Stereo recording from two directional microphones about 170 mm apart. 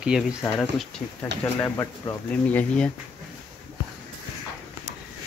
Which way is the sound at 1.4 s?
15° left (ahead or behind).